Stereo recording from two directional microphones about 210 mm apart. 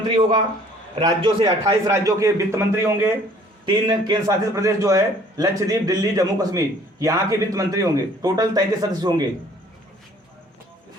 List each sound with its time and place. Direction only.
0.2 s a man's voice: 30° right (ahead or behind)